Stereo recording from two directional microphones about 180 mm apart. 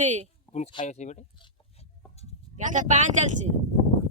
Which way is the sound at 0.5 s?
40° left (ahead or behind).